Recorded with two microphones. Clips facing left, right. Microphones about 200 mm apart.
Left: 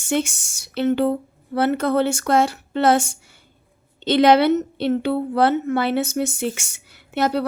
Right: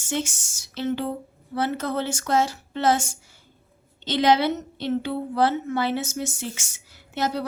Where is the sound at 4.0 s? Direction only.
60° left (ahead or behind).